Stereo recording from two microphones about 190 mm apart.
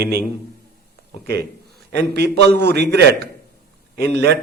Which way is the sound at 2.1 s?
60° right (ahead or behind).